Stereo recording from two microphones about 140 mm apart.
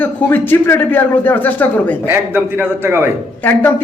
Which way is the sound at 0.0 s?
15° left (ahead or behind).